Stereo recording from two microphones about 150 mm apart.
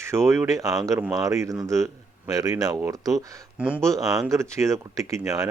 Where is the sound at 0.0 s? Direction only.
20° right (ahead or behind).